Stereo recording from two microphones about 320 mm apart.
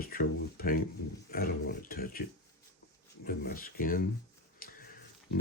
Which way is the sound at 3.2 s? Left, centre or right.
Left.